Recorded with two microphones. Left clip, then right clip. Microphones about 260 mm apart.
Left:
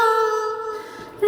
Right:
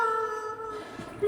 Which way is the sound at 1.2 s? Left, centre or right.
Left.